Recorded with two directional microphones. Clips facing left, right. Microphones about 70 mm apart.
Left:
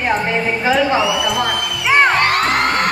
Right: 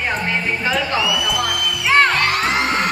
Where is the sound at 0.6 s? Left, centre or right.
Left.